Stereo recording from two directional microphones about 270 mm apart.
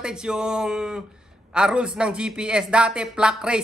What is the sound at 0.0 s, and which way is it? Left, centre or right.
Speech, centre.